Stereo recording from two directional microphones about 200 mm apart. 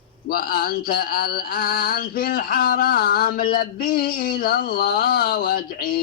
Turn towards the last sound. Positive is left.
turn(degrees=50)  # may be behind; listen again after turning